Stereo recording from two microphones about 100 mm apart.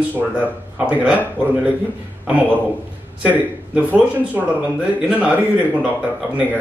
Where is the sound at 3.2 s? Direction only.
15° right (ahead or behind).